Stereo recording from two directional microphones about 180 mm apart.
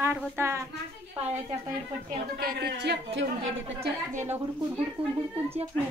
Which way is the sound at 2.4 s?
60° right (ahead or behind).